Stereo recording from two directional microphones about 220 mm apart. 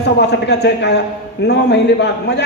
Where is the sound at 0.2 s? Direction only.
50° left (ahead or behind).